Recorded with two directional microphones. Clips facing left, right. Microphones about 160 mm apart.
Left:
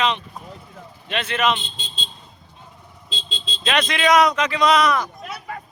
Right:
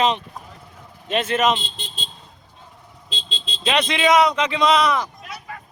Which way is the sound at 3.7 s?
30° right (ahead or behind).